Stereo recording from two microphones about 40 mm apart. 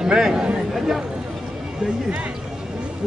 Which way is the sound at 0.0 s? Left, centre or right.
Centre.